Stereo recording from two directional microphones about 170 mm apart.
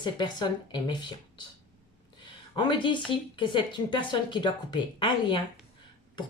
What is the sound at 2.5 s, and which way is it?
Speech, 30° left (ahead or behind).